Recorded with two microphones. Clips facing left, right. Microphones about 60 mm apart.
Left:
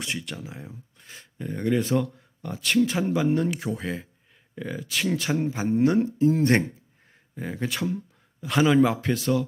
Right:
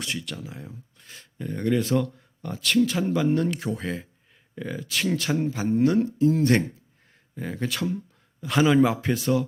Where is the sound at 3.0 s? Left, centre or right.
Centre; by 6.6 s left.